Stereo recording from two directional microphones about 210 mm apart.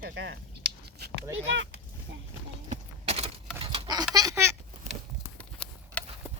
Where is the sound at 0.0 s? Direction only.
55° right (ahead or behind).